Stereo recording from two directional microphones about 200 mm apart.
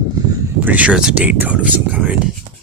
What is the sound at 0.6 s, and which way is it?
Speech, 5° right (ahead or behind).